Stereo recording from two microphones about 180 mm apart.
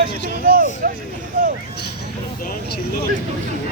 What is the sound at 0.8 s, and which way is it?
Vehicle, 50° right (ahead or behind).